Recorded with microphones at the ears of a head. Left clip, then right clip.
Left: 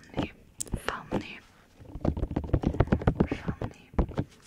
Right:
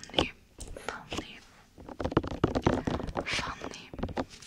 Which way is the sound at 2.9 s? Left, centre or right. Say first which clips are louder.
Left 6 dB; left.